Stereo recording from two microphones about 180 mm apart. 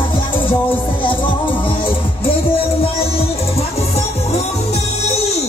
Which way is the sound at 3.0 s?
35° left (ahead or behind).